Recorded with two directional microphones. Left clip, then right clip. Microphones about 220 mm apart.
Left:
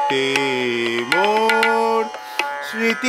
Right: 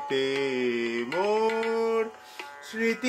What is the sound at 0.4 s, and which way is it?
Music, 30° left (ahead or behind).